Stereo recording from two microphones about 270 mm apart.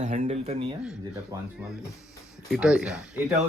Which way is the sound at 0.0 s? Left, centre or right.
Right.